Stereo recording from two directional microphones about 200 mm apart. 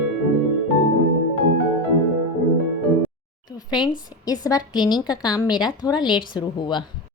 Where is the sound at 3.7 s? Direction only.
20° left (ahead or behind).